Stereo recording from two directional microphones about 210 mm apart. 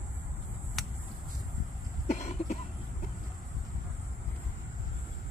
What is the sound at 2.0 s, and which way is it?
Cough, 35° left (ahead or behind).